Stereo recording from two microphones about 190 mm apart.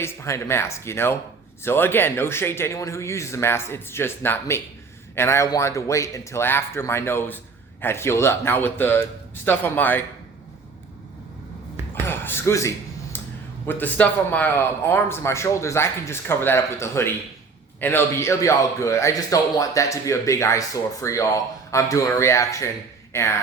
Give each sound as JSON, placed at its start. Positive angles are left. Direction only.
{"t": 0.0, "sound": "a man's voice", "side_deg": 15}
{"t": 12.0, "sound": "a sound", "side_deg": 10}
{"t": 13.7, "sound": "a man's voice", "side_deg": 10}